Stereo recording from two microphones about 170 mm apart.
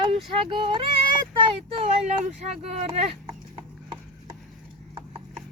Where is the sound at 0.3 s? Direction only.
30° right (ahead or behind).